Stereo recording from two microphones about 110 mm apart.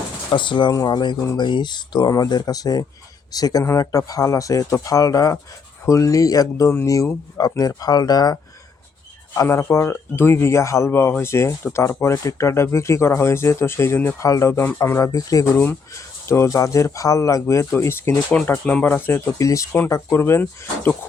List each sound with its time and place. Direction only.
0.3 s speech: 50° left (ahead or behind)
0.7 s speech: 35° left (ahead or behind)
9.3 s speech: 25° left (ahead or behind)
15.5 s speech: 20° left (ahead or behind)